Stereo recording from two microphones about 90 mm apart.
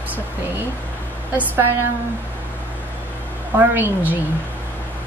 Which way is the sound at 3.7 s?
20° right (ahead or behind).